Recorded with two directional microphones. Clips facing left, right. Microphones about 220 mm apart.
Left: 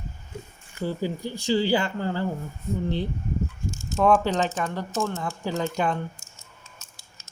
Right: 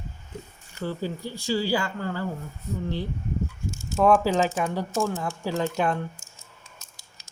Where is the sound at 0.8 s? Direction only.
15° left (ahead or behind).